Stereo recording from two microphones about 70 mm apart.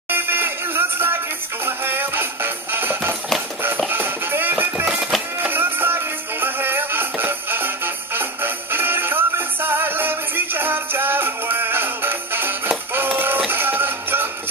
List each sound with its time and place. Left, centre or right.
0.1 s music: right